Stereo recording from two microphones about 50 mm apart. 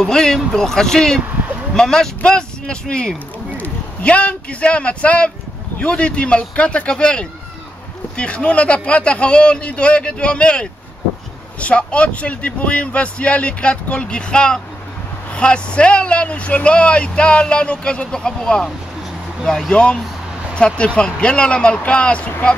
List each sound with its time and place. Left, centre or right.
0.0 s speech: centre
3.5 s a man's voice: left
19.7 s speech: centre